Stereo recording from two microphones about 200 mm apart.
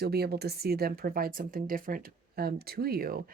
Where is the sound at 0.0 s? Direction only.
55° right (ahead or behind).